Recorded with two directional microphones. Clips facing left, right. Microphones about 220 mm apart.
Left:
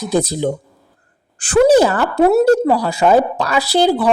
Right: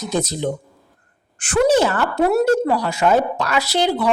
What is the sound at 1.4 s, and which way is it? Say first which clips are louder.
Speech: left 5 dB; 35° left (ahead or behind).